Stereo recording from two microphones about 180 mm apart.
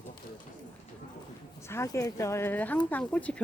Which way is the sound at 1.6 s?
15° left (ahead or behind).